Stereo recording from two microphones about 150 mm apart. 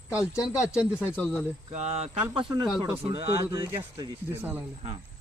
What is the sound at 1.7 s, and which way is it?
Speech, 45° right (ahead or behind).